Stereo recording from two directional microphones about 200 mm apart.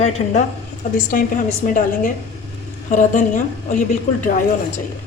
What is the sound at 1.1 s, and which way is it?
A woman's voice, 45° left (ahead or behind).